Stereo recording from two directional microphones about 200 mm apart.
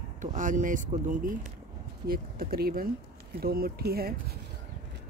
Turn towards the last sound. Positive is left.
turn(degrees=-50)  # may be behind; listen again after turning